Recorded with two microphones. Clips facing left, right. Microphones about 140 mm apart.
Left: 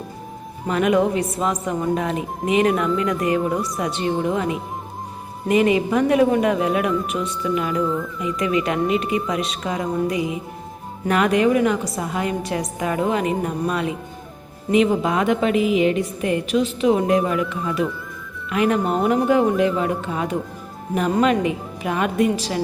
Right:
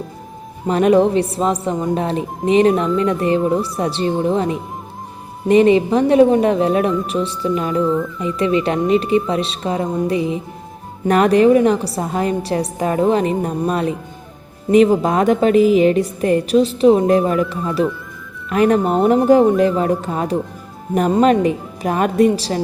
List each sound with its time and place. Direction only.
0.7 s a woman's voice: 35° right (ahead or behind)